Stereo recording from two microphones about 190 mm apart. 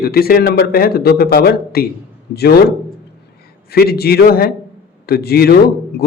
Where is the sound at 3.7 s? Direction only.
55° left (ahead or behind).